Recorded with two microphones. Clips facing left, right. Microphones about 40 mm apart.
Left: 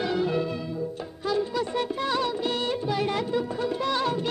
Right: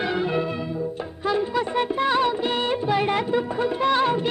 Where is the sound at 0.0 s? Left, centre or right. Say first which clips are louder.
Right 2 dB; right.